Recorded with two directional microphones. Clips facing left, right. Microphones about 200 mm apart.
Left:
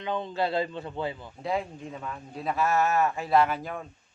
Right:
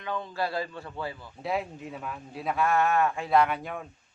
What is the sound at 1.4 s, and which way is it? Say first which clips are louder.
A man's voice: even; 5° right (ahead or behind).